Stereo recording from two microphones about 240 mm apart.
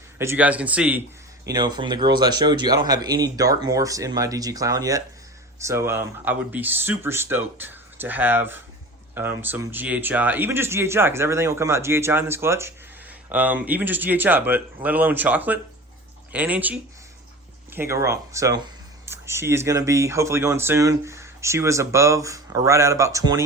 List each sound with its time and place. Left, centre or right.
0.2 s speech: centre
1.5 s speech: centre